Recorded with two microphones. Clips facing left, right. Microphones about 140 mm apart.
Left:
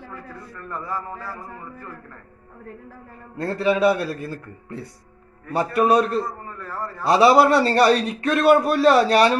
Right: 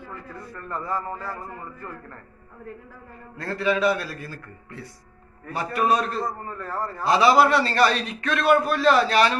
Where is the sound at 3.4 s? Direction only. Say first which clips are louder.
Left 4 dB; 35° left (ahead or behind).